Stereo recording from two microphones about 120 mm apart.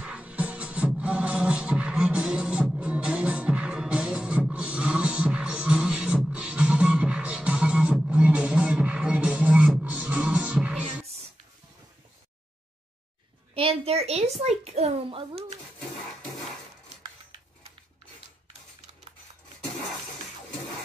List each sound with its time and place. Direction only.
0.0 s music: 10° right (ahead or behind)
13.6 s speech: 55° right (ahead or behind)